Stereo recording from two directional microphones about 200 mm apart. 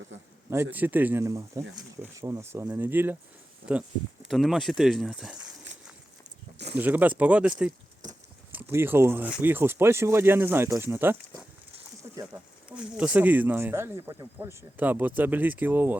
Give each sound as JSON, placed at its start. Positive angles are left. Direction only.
{"t": 0.5, "sound": "speech", "side_deg": -10}
{"t": 4.3, "sound": "speech", "side_deg": 0}
{"t": 6.7, "sound": "speech", "side_deg": -10}
{"t": 8.5, "sound": "speech", "side_deg": -10}
{"t": 12.1, "sound": "a sound", "side_deg": -15}
{"t": 12.6, "sound": "speech", "side_deg": -5}